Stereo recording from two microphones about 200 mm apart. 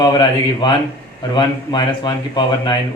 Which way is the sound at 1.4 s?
20° left (ahead or behind).